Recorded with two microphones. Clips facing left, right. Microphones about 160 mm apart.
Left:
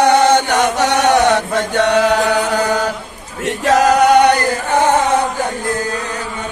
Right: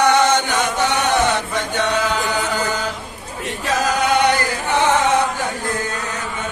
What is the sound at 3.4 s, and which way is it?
Choir, 80° left.